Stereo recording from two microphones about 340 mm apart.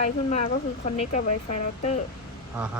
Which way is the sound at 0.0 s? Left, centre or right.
Centre.